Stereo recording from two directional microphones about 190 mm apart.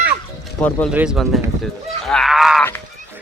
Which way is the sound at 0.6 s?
5° left (ahead or behind).